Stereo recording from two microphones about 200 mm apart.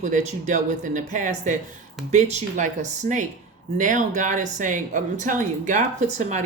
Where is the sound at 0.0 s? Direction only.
40° right (ahead or behind).